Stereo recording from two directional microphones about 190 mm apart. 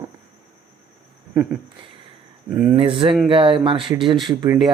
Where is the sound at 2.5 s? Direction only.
10° right (ahead or behind).